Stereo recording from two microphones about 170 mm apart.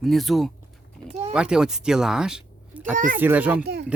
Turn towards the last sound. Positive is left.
turn(degrees=-75)  # may be behind; listen again after turning